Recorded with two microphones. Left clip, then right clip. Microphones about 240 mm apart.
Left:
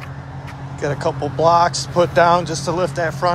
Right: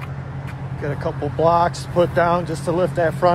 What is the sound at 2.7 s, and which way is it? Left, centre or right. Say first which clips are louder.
Speech: right 3 dB; centre.